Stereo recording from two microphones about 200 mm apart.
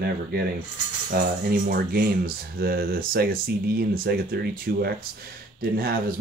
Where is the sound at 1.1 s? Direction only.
45° right (ahead or behind).